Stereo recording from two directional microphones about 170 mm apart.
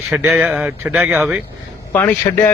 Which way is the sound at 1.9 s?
15° left (ahead or behind).